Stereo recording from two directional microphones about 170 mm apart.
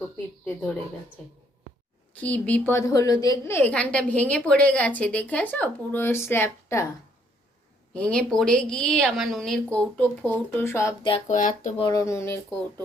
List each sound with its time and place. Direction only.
0.4 s a woman's voice: 5° left (ahead or behind)
2.1 s a woman's voice: 10° left (ahead or behind)
7.9 s a woman's voice: 5° left (ahead or behind)
11.3 s speech: 45° left (ahead or behind)
11.8 s a woman's voice: 20° left (ahead or behind)